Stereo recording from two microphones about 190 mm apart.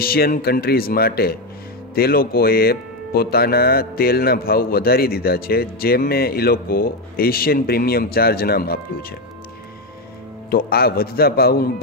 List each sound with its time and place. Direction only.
0.0 s speech: 50° left (ahead or behind)
10.5 s speech: 55° left (ahead or behind)